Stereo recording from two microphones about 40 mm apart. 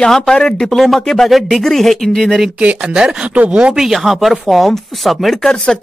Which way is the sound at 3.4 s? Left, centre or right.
Right.